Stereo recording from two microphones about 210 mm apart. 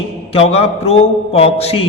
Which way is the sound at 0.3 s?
30° left (ahead or behind).